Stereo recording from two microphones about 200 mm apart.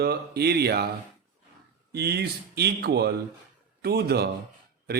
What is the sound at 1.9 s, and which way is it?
A man's voice, 55° right (ahead or behind).